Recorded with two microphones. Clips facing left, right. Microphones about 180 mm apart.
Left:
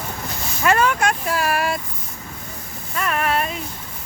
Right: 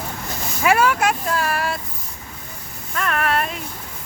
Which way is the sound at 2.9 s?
5° left (ahead or behind).